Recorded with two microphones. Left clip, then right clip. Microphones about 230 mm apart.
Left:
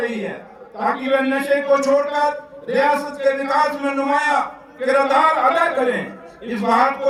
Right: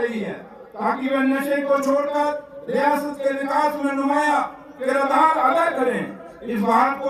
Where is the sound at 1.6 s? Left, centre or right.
Left.